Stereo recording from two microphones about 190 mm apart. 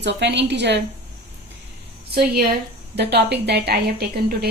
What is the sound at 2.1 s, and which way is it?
A woman's voice, 55° right (ahead or behind).